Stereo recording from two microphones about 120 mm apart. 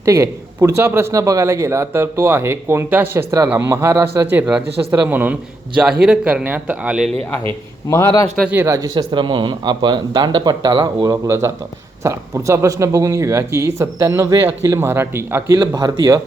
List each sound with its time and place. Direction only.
0.0 s a man's voice: 25° right (ahead or behind); by 7.1 s 10° right (ahead or behind)
7.9 s a man's voice: 25° left (ahead or behind)
8.4 s speech: 20° right (ahead or behind)
9.0 s speech: 40° right (ahead or behind)